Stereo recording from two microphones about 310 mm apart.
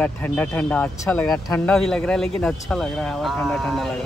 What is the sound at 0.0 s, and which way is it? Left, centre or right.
Speech, centre.